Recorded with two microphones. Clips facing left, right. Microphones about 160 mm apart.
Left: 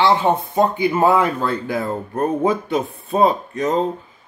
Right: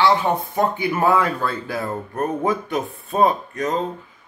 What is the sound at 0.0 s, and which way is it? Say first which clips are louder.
A man's voice: left 2 dB; 20° left (ahead or behind).